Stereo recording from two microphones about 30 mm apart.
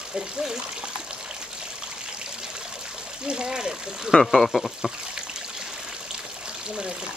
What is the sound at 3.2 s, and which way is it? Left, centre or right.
Speech, right.